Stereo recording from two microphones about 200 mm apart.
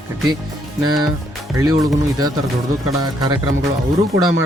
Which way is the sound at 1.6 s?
15° right (ahead or behind).